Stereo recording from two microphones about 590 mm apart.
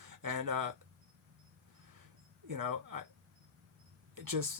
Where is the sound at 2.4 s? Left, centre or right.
Right.